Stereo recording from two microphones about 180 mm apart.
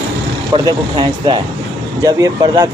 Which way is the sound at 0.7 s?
25° right (ahead or behind).